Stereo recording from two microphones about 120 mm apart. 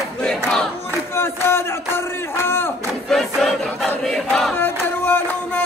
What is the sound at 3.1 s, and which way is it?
Crowd, centre (ahead or behind).